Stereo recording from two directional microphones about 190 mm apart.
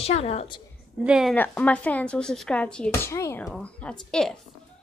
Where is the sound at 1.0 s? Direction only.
5° right (ahead or behind).